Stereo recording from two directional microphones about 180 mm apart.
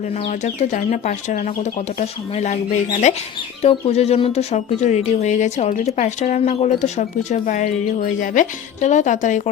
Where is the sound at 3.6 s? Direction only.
35° left (ahead or behind).